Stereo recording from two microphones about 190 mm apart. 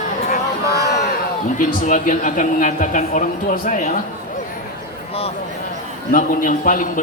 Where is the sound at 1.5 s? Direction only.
45° left (ahead or behind).